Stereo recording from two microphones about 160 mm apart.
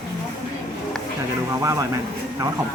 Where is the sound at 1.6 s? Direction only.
20° right (ahead or behind).